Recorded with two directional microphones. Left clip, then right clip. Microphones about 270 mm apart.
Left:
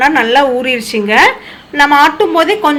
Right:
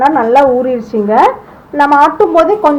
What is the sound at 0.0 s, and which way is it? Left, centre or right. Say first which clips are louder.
A woman's voice: right 1 dB; centre.